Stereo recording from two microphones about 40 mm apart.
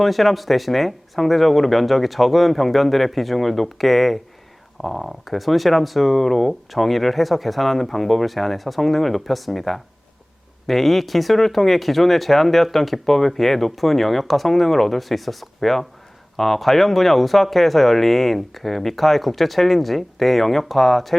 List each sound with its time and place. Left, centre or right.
0.0 s speech: centre